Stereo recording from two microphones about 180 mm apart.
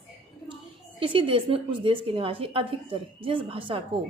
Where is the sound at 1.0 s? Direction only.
30° right (ahead or behind).